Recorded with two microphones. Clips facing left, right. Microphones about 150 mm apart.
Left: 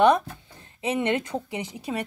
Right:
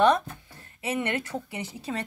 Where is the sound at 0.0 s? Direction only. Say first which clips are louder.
Left 2 dB; 15° left (ahead or behind).